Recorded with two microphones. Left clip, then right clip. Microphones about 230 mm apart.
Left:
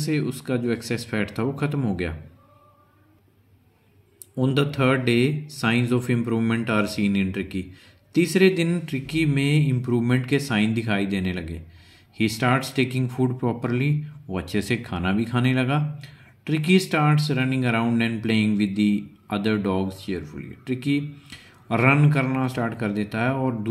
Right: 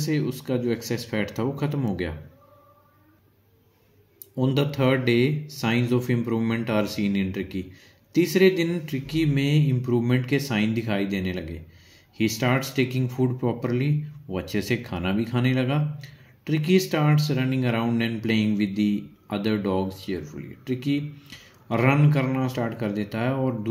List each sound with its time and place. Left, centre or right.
0.0 s speech: centre
4.4 s speech: centre